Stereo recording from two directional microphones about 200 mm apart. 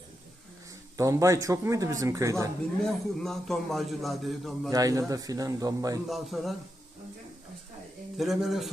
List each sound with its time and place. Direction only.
0.9 s speech: 15° right (ahead or behind)
2.8 s a man's voice: centre (ahead or behind)
4.7 s speech: 15° right (ahead or behind)
6.1 s a man's voice: centre (ahead or behind)
8.2 s a man's voice: centre (ahead or behind)